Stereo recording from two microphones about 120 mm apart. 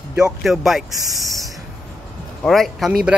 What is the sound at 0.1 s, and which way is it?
Speech, 5° right (ahead or behind).